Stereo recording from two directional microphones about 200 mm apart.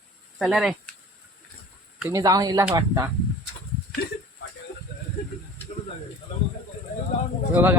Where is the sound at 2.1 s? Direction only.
15° right (ahead or behind).